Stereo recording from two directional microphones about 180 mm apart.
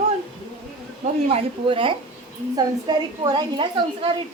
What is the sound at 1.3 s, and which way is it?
A woman's voice, 30° right (ahead or behind).